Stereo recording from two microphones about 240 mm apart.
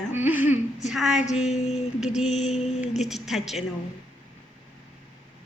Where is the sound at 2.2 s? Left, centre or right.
Left.